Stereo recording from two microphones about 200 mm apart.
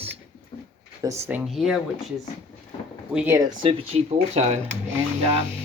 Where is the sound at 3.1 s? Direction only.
15° right (ahead or behind); by 4.6 s 35° right (ahead or behind).